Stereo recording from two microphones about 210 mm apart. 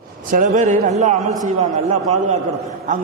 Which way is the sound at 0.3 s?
35° right (ahead or behind).